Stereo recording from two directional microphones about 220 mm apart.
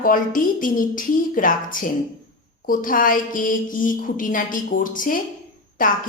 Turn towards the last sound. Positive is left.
turn(degrees=40)  # may be behind; listen again after turning